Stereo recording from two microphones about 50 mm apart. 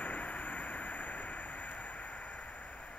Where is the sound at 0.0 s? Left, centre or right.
Left.